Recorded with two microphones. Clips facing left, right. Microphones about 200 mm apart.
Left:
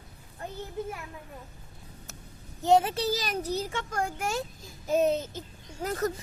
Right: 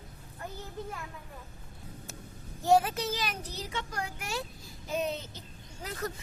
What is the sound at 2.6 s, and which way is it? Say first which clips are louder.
A woman's voice: left 2 dB; 25° left (ahead or behind).